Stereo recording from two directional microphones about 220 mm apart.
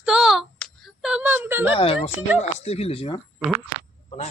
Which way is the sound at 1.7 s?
25° left (ahead or behind).